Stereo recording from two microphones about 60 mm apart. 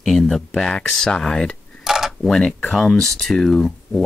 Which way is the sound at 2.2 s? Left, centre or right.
Centre.